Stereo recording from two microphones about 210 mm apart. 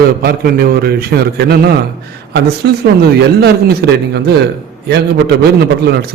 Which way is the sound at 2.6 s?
50° right (ahead or behind).